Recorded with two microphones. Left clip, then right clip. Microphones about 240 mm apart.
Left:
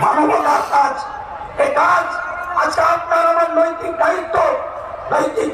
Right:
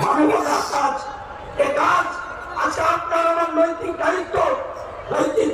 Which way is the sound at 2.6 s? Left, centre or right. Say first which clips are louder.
Left 4 dB; centre.